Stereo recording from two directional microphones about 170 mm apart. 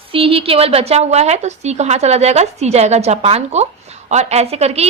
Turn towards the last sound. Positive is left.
turn(degrees=-40)  # may be behind; listen again after turning